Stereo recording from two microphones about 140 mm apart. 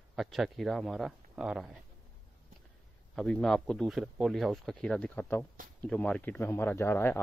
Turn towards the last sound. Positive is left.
turn(degrees=15)  # may be behind; listen again after turning